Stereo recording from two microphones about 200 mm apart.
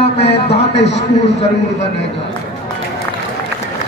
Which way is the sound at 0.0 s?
30° left (ahead or behind).